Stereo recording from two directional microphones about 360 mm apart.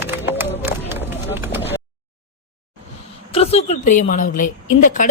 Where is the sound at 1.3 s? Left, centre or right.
Centre.